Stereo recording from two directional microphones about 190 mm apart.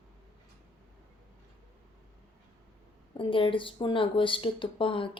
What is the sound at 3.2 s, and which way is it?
Speech, 25° left (ahead or behind).